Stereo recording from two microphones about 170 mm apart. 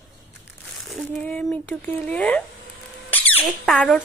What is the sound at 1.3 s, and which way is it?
Speech, 5° left (ahead or behind).